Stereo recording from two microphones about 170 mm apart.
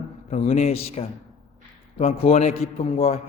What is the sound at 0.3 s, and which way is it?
A man's voice, 40° left (ahead or behind).